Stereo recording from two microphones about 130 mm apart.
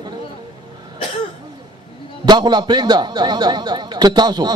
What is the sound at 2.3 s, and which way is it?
A man's voice, 35° right (ahead or behind).